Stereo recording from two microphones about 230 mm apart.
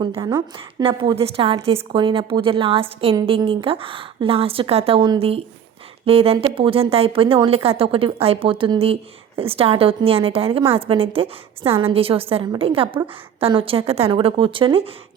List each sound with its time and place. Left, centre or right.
0.0 s a woman's voice: centre